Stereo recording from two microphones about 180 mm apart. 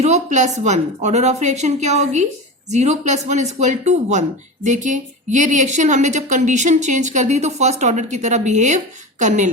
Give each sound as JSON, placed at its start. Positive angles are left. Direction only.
{"t": 0.0, "sound": "a woman's voice", "side_deg": -40}